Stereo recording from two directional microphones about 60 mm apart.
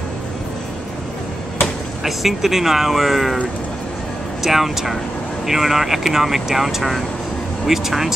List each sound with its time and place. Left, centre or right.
2.0 s speech: centre
4.4 s speech: centre